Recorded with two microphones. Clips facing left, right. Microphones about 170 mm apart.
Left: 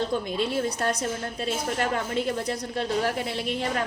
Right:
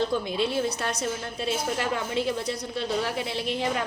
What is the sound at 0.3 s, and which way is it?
A woman's voice, 45° left (ahead or behind).